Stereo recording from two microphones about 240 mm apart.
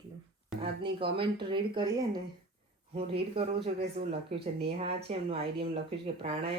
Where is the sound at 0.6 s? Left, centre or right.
Right.